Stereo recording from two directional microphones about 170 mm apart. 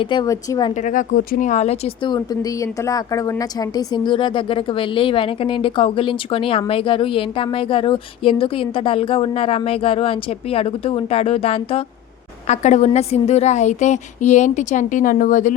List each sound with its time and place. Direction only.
0.0 s speech: 25° left (ahead or behind)
0.7 s a woman's voice: 45° left (ahead or behind)